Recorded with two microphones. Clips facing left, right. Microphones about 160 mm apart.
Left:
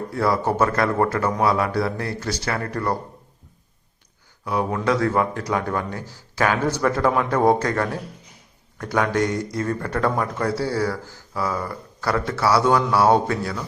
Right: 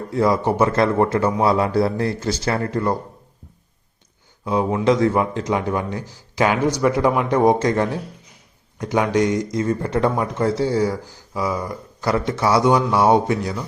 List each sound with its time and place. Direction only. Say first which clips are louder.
0.1 s speech: right 4 dB; 20° right (ahead or behind)
4.4 s speech: right 4 dB; 20° right (ahead or behind)